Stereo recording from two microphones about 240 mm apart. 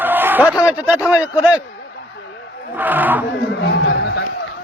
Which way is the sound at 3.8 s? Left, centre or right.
Left.